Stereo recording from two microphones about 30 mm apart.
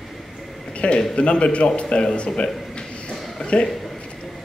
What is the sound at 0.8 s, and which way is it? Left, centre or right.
A man's voice, left.